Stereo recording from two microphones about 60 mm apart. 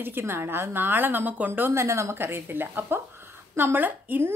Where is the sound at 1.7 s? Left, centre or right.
Right.